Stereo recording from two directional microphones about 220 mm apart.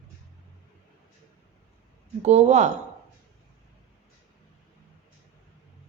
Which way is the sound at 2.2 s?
30° right (ahead or behind).